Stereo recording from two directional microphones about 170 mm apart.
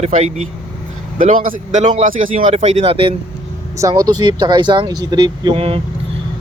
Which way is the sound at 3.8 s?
20° right (ahead or behind).